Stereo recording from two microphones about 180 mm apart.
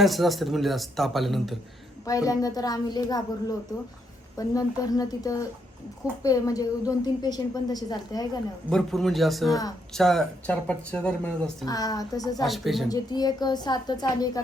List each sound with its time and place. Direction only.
0.0 s speech: centre (ahead or behind)
2.0 s a woman's voice: 20° left (ahead or behind)
4.4 s a woman's voice: 20° left (ahead or behind)
8.7 s speech: centre (ahead or behind)
11.6 s a woman's voice: 20° left (ahead or behind)
12.4 s speech: centre (ahead or behind)
12.9 s a woman's voice: 20° left (ahead or behind)